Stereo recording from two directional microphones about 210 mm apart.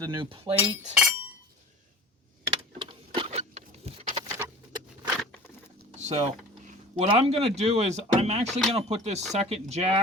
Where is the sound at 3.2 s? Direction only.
30° right (ahead or behind).